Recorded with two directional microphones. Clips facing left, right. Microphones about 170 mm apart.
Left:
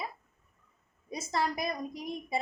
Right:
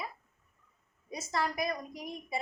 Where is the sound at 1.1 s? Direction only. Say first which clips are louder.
Left 2 dB; 25° left (ahead or behind).